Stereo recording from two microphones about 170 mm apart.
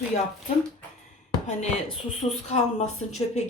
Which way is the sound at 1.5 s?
40° left (ahead or behind).